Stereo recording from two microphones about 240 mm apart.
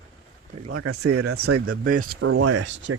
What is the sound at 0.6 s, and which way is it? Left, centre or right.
Speech, right.